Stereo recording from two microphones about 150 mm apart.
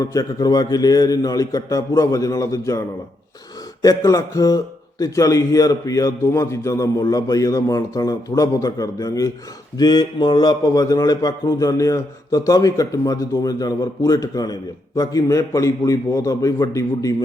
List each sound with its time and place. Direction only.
0.0 s a man's voice: 25° left (ahead or behind)
3.8 s a man's voice: 20° left (ahead or behind)